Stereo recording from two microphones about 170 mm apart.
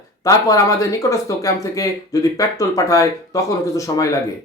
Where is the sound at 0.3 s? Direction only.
20° left (ahead or behind).